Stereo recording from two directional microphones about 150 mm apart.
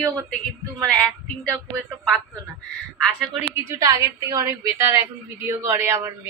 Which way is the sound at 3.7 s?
20° right (ahead or behind).